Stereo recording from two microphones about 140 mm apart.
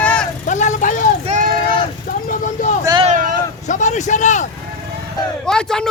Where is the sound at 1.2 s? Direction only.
60° right (ahead or behind).